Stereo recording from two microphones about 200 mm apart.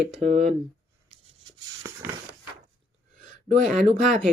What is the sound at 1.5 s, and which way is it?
Rub, 15° right (ahead or behind).